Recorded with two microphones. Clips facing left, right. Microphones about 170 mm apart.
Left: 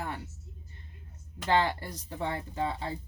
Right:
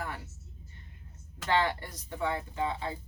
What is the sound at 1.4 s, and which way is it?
Speech, 30° left (ahead or behind).